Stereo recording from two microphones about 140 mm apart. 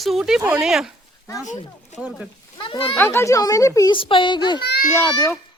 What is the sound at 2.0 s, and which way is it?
Speech, 5° right (ahead or behind).